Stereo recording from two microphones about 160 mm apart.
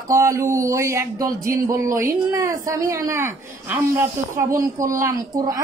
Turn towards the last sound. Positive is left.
turn(degrees=-20)  # may be behind; listen again after turning